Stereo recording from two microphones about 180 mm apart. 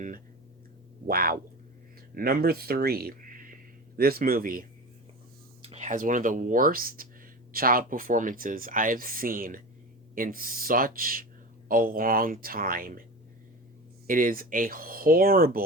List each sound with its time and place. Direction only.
1.0 s a sound: 55° right (ahead or behind)
2.1 s speech: 55° right (ahead or behind)
5.6 s speech: 40° right (ahead or behind)
14.1 s speech: 50° right (ahead or behind)